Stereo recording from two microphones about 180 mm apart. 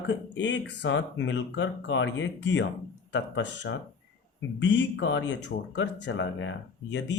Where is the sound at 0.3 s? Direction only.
85° left.